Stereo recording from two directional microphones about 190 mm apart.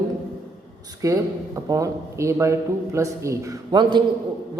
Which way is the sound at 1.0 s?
20° right (ahead or behind).